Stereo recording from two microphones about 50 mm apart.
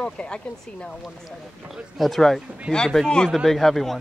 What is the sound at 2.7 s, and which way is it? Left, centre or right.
Speech, centre.